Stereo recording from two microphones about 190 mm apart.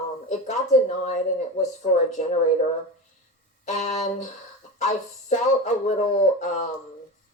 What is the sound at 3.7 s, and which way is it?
Speech, 35° left (ahead or behind).